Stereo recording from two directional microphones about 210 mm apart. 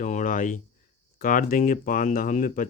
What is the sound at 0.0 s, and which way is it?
Speech, 35° left (ahead or behind).